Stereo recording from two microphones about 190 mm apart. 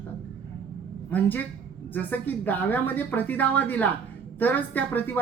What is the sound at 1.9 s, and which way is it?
Speech, 10° left (ahead or behind).